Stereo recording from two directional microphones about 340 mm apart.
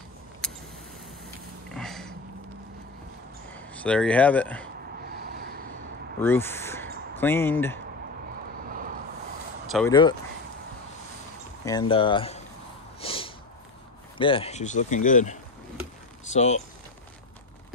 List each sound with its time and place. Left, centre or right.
1.7 s a sound: centre
3.5 s speech: centre
5.0 s a sound: right
6.1 s speech: centre
8.6 s vehicle: right
9.7 s speech: centre
11.6 s speech: centre
13.0 s a sound: centre
14.1 s speech: centre
16.3 s speech: centre